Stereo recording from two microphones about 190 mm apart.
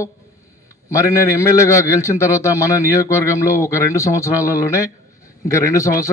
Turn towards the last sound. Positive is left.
turn(degrees=15)  # may be behind; listen again after turning